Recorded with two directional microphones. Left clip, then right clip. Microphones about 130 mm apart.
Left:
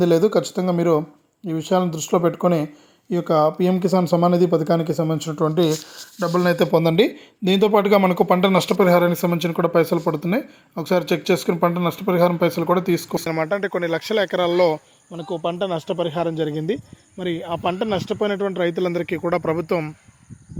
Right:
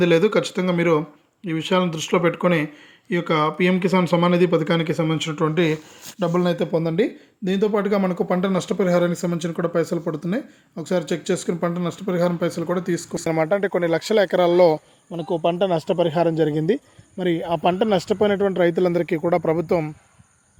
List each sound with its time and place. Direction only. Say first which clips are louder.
0.0 s speech: even; 15° left (ahead or behind)
6.4 s speech: left 9 dB; 10° left (ahead or behind)
13.2 s speech: right 6 dB; 20° right (ahead or behind)
15.1 s speech: right 3 dB; 40° right (ahead or behind); by 19.9 s 15° right (ahead or behind)